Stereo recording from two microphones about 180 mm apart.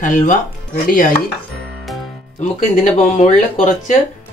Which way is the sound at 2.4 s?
45° left (ahead or behind).